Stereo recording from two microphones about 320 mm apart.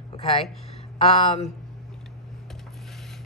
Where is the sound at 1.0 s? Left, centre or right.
Centre.